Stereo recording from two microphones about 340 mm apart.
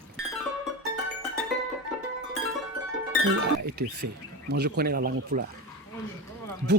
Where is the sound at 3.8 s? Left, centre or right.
Right.